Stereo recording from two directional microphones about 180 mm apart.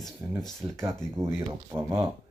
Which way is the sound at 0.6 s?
10° right (ahead or behind).